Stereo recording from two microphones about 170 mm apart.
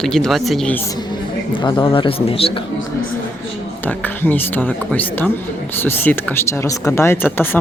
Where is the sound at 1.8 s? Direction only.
30° left (ahead or behind).